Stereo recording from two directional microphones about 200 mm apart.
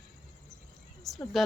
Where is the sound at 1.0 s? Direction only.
Centre (ahead or behind).